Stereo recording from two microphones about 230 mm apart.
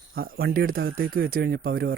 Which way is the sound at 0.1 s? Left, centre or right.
Right.